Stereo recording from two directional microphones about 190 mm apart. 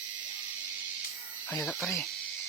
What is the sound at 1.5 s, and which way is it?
Speech, centre (ahead or behind).